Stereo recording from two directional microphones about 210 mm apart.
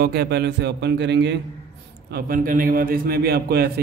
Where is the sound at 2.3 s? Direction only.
45° right (ahead or behind).